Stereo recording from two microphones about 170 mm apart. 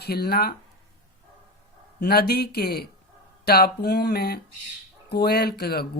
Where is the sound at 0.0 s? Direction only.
70° left (ahead or behind).